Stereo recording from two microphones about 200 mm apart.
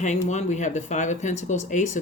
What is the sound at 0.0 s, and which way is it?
Speech, 35° left (ahead or behind).